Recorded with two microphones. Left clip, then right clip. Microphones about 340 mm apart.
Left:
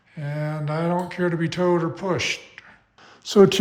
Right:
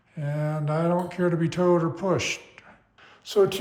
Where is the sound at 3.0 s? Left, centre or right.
Centre.